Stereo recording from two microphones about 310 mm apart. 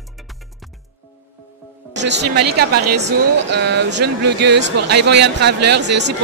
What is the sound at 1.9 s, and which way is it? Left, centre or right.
Speech, right.